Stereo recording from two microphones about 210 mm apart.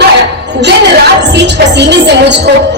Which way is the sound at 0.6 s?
55° right (ahead or behind).